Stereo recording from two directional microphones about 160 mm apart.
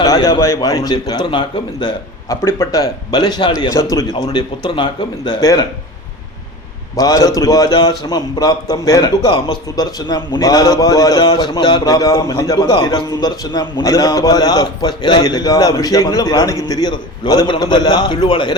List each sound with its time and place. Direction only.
0.0 s a man's voice: 20° left (ahead or behind)
2.3 s a man's voice: 15° left (ahead or behind)
6.9 s a man's voice: 20° left (ahead or behind)